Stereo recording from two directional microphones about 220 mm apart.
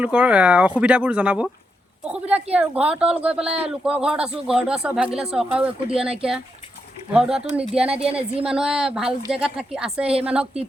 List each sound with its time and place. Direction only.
0.0 s speech: 5° right (ahead or behind)
7.9 s speech: 25° right (ahead or behind)
8.4 s speech: 5° right (ahead or behind)